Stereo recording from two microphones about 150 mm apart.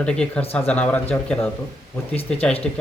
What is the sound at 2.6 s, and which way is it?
Speech, 5° left (ahead or behind).